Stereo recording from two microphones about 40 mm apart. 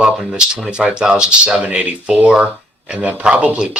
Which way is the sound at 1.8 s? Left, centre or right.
Right.